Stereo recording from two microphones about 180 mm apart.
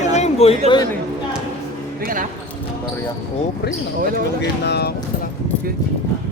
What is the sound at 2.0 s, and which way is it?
Speech, 45° right (ahead or behind).